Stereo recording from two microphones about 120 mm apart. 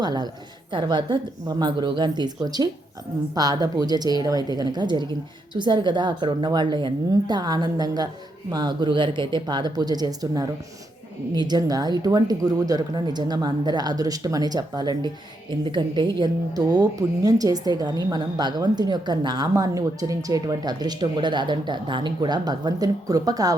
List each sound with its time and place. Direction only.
0.0 s speech: 35° right (ahead or behind)